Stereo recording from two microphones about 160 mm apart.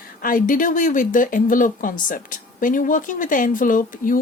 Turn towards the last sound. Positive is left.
turn(degrees=60)  # may be behind; listen again after turning